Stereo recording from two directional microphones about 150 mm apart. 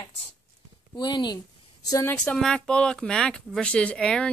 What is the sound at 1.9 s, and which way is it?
Speech, 15° left (ahead or behind).